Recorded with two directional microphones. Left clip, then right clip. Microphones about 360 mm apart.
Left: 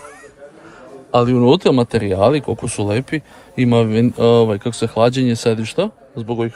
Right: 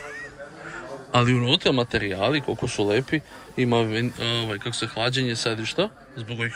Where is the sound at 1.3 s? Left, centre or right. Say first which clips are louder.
Left 8 dB; centre.